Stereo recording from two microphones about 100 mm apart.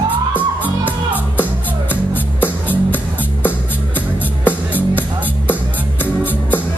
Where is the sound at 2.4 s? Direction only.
20° left (ahead or behind).